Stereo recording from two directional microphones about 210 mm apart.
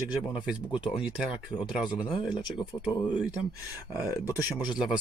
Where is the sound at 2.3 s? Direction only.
20° left (ahead or behind).